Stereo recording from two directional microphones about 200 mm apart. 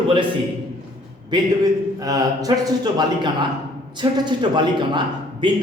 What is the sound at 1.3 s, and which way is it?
A man's voice, 20° right (ahead or behind).